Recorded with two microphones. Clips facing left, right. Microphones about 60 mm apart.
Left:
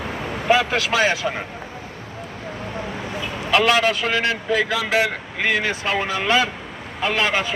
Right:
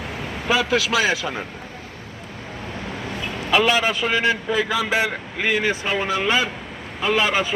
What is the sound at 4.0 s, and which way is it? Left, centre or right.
Speech, centre.